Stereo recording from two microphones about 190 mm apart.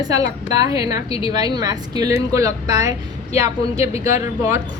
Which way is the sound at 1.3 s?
20° right (ahead or behind).